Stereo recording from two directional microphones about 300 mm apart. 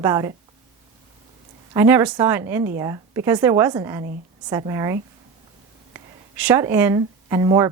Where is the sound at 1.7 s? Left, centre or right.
Centre.